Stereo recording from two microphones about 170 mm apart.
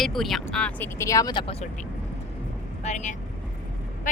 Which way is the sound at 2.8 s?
45° left (ahead or behind).